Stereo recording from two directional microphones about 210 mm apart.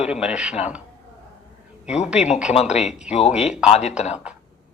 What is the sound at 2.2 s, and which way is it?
Speech, 30° left (ahead or behind).